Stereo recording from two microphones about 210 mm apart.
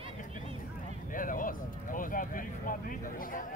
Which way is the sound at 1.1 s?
40° left (ahead or behind).